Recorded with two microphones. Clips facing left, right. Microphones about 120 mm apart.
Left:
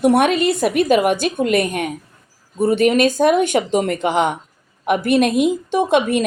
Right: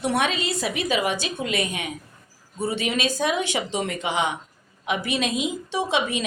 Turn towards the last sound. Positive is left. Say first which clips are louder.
# left 8 dB
turn(degrees=50)  # may be behind; listen again after turning